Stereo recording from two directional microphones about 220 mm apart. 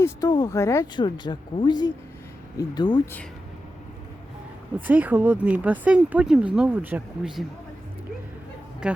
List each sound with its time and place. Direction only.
0.0 s speech: 20° left (ahead or behind)
4.9 s speech: 5° right (ahead or behind)